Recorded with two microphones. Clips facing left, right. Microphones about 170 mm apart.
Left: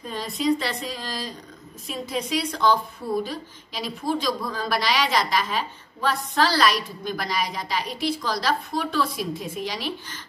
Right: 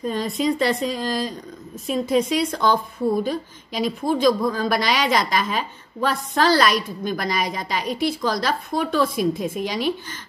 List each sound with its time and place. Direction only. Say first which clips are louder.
0.0 s a woman's voice: right 4 dB; 45° right (ahead or behind)